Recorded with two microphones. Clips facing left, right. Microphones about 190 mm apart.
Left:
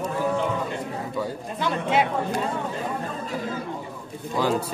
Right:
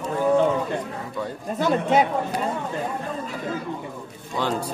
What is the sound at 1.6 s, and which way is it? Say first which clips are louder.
Speech: right 4 dB; 45° right (ahead or behind).